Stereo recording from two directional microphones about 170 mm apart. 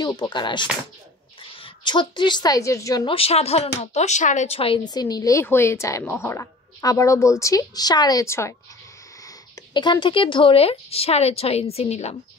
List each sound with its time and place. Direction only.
0.0 s a woman's voice: 25° left (ahead or behind)
3.1 s speech: 35° left (ahead or behind); by 8.5 s 15° left (ahead or behind)
9.8 s speech: 30° left (ahead or behind)